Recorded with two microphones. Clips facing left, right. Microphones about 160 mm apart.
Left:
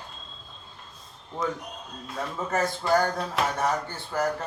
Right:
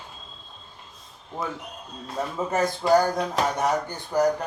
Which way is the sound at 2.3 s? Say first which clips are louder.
Right 2 dB; 20° right (ahead or behind).